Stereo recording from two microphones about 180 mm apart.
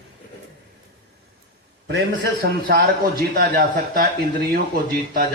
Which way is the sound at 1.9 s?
65° right (ahead or behind).